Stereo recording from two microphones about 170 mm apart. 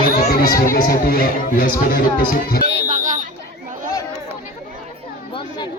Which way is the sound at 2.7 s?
40° right (ahead or behind).